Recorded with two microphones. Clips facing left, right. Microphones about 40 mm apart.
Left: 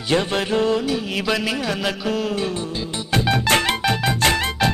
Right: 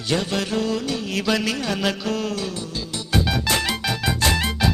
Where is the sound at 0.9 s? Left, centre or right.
Centre.